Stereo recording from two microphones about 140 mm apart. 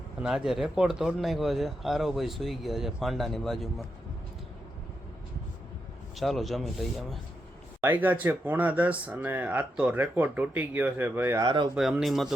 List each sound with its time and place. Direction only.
0.2 s speech: 5° right (ahead or behind)
6.1 s speech: centre (ahead or behind)
7.8 s speech: 15° right (ahead or behind)
11.3 s speech: 35° right (ahead or behind)
11.7 s speech: 5° right (ahead or behind)